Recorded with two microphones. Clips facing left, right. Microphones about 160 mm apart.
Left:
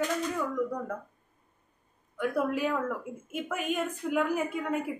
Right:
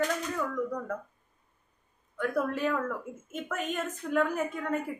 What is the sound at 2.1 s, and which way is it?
A woman's voice, 10° left (ahead or behind).